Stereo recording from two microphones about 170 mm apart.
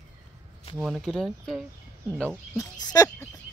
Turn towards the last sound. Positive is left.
turn(degrees=25)  # may be behind; listen again after turning